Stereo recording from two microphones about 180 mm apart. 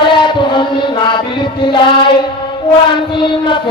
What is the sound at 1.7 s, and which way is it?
Chant, 25° left (ahead or behind).